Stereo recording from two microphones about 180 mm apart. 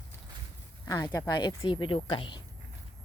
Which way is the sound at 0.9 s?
15° left (ahead or behind).